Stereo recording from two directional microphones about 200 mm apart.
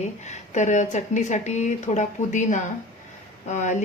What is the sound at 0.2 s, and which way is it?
Speech, 35° left (ahead or behind).